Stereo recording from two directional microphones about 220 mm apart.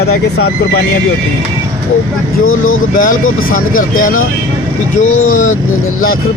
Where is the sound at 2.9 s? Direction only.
40° left (ahead or behind).